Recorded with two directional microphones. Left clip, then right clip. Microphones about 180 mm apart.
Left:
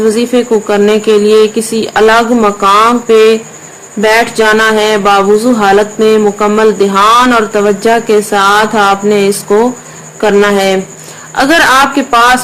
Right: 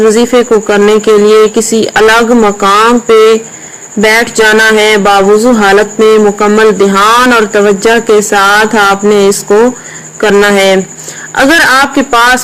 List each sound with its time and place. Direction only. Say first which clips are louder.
0.0 s speech: right 4 dB; 25° right (ahead or behind)